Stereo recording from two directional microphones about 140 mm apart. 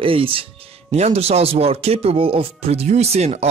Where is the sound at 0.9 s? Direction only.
50° right (ahead or behind).